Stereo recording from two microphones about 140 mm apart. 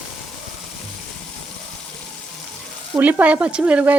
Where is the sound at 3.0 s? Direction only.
10° right (ahead or behind).